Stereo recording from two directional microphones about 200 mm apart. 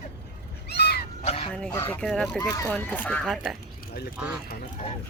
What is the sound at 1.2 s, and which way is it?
Honk, 30° left (ahead or behind).